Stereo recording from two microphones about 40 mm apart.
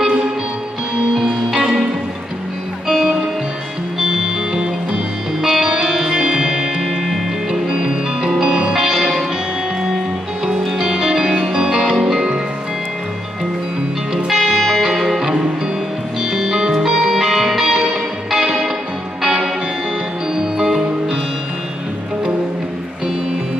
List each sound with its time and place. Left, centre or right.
1.1 s music: centre
2.9 s music: centre
10.8 s music: centre
14.1 s music: centre
20.5 s music: centre